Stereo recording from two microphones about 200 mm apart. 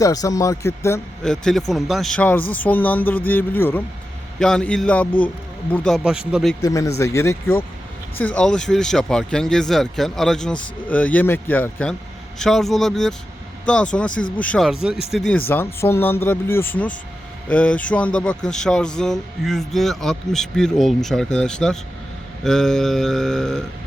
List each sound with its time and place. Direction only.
0.0 s speech: 15° left (ahead or behind)
1.2 s a man's voice: centre (ahead or behind)
6.6 s a man's voice: 15° left (ahead or behind)